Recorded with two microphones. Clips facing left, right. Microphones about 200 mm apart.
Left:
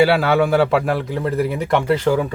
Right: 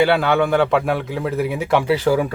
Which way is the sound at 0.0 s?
5° left (ahead or behind).